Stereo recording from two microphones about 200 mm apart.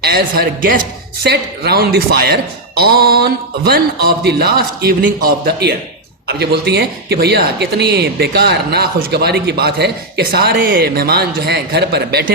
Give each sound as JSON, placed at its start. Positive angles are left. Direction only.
{"t": 0.0, "sound": "speech", "side_deg": -50}